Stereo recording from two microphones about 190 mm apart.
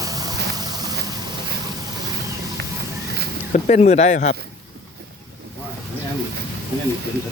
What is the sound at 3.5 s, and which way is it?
Speech, 40° left (ahead or behind).